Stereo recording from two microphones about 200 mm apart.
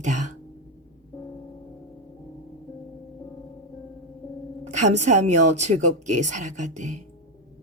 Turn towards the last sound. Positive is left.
turn(degrees=-35)  # may be behind; listen again after turning